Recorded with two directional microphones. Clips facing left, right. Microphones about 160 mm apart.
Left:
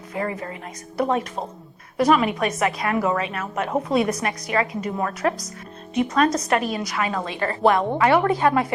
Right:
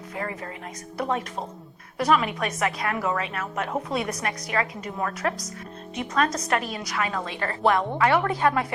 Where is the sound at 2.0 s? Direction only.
15° left (ahead or behind).